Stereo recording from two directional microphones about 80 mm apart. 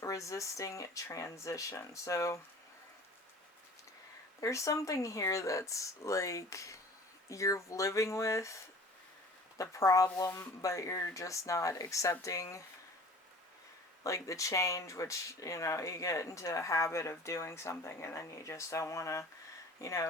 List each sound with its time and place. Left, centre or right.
0.0 s speech: left
4.4 s speech: left
9.6 s speech: left
14.0 s speech: left